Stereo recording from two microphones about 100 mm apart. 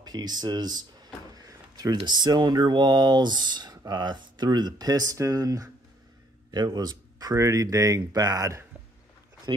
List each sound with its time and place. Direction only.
0.0 s drawer open or close: 45° right (ahead or behind)
2.0 s speech: 45° right (ahead or behind)